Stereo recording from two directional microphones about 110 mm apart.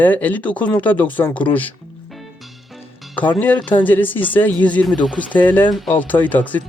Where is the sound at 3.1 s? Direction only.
15° left (ahead or behind).